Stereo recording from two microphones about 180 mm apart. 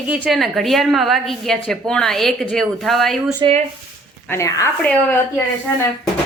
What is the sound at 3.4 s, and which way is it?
Speech, 25° right (ahead or behind).